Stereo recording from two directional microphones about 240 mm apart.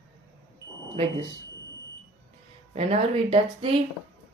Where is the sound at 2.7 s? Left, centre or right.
Right.